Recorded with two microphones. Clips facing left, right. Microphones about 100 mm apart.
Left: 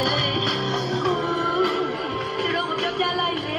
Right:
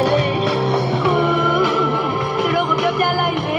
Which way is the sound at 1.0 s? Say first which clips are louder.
Right 7 dB; 90° right.